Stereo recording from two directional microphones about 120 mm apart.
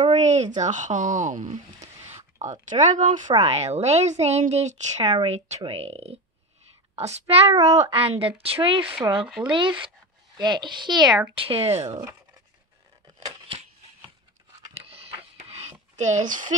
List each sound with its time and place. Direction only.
0.1 s a woman's voice: 75° right (ahead or behind); by 3.3 s 90° right
3.4 s speech: 65° right (ahead or behind)
5.1 s a child's voice: 60° right (ahead or behind); by 11.1 s 40° right (ahead or behind)
11.3 s speech: 50° right (ahead or behind)
14.9 s a sound: 55° right (ahead or behind)
16.0 s a woman's voice: 85° right